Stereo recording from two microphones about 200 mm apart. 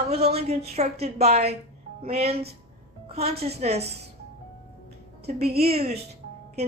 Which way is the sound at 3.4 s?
30° right (ahead or behind).